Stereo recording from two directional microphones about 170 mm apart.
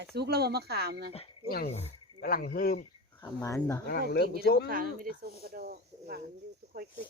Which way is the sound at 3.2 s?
20° left (ahead or behind).